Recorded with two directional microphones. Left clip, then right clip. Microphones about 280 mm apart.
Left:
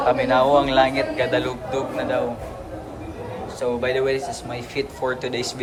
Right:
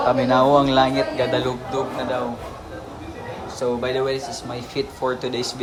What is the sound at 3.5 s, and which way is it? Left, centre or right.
Speech, centre.